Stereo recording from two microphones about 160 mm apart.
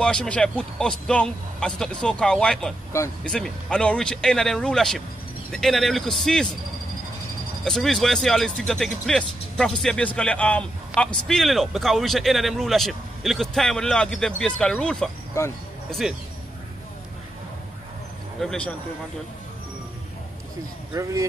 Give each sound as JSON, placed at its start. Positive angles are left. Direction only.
{"t": 0.0, "sound": "speech", "side_deg": 5}
{"t": 7.6, "sound": "speech", "side_deg": 5}
{"t": 18.4, "sound": "speech", "side_deg": 5}
{"t": 20.9, "sound": "speech", "side_deg": -20}